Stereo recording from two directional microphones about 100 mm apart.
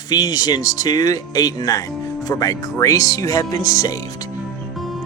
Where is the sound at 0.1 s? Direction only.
40° left (ahead or behind).